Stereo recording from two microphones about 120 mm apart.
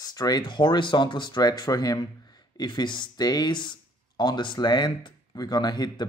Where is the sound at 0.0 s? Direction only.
35° left (ahead or behind).